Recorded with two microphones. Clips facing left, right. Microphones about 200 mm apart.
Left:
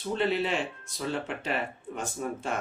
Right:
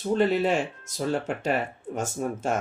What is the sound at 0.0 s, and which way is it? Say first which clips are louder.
Speech: right 5 dB; 45° right (ahead or behind).